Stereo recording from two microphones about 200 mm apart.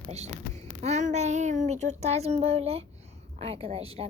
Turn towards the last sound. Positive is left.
turn(degrees=-30)  # may be behind; listen again after turning